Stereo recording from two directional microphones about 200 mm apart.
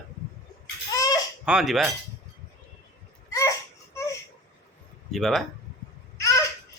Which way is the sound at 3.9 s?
15° left (ahead or behind).